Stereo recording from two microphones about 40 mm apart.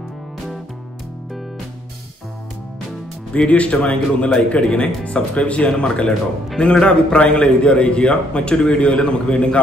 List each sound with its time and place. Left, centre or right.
3.3 s a man's voice: left